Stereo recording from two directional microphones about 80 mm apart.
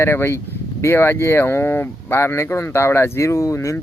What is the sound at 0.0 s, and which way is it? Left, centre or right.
Speech, left.